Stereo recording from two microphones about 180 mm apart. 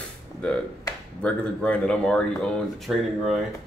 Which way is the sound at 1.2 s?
5° left (ahead or behind).